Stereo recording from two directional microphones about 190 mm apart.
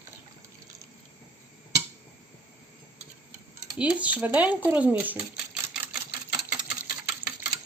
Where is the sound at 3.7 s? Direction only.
5° right (ahead or behind).